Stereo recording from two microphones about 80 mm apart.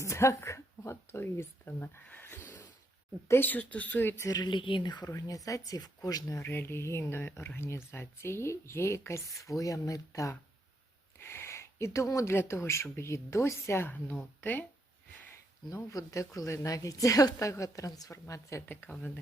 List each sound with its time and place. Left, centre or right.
0.0 s a woman's voice: left
4.3 s speech: left
5.0 s a woman's voice: left
6.4 s speech: left
11.2 s speech: left
13.8 s speech: left
15.3 s a woman's voice: left
18.7 s speech: left